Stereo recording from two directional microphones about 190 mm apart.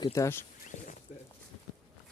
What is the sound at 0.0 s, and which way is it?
Speech, 15° left (ahead or behind).